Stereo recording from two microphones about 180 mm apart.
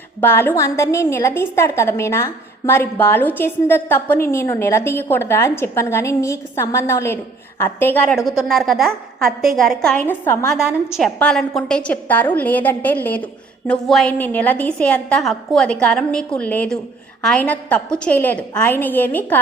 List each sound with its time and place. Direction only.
0.2 s a woman's voice: 10° left (ahead or behind)
8.1 s a woman's voice: centre (ahead or behind)
10.6 s a woman's voice: centre (ahead or behind)